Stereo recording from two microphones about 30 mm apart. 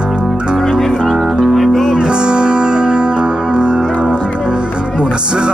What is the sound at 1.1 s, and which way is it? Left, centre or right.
Music, centre.